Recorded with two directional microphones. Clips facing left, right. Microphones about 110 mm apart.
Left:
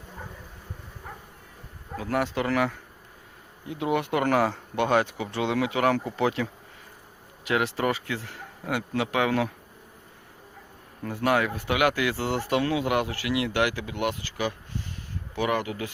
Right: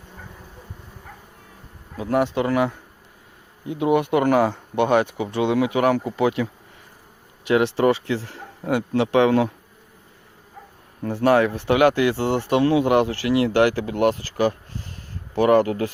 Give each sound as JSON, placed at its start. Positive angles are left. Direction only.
{"t": 2.0, "sound": "speech", "side_deg": -25}
{"t": 11.0, "sound": "speech", "side_deg": -35}